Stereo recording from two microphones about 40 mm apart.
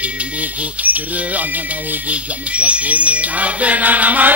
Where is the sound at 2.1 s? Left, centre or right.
Right.